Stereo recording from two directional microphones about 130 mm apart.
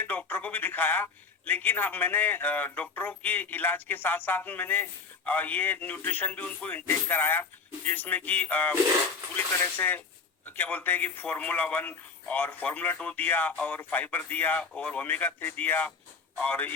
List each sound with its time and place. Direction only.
0.0 s a man's voice: 15° left (ahead or behind)
9.7 s a man's voice: 15° left (ahead or behind)